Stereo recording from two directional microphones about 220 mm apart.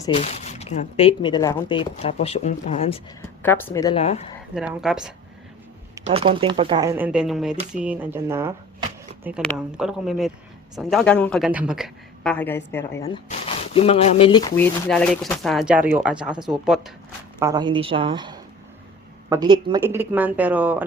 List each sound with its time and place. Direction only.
0.1 s speech: 30° left (ahead or behind)
3.2 s a woman's voice: 10° left (ahead or behind)
3.9 s speech: 30° left (ahead or behind)
4.5 s speech: 5° right (ahead or behind)
6.1 s speech: 25° right (ahead or behind)
9.6 s speech: 5° right (ahead or behind)
13.2 s speech: 25° left (ahead or behind)
14.5 s speech: 5° left (ahead or behind)
17.4 s a woman's voice: 20° right (ahead or behind)